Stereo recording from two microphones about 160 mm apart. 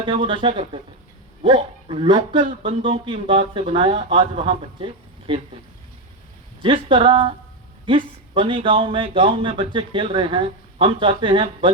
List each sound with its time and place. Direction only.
0.0 s speech: 30° right (ahead or behind)
6.6 s speech: 30° right (ahead or behind)
8.4 s speech: 30° right (ahead or behind)